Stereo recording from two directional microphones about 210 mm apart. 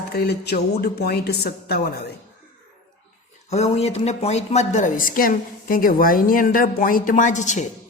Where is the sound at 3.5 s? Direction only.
30° left (ahead or behind).